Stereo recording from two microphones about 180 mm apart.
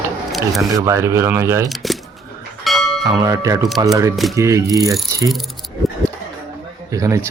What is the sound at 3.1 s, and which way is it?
Speech, 20° right (ahead or behind).